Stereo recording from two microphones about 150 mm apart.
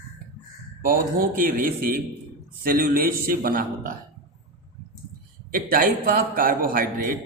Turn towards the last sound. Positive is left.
turn(degrees=-70)  # may be behind; listen again after turning